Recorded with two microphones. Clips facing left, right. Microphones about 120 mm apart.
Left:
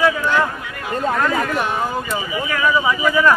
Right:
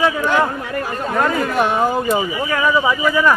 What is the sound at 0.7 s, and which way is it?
Speech, 35° right (ahead or behind).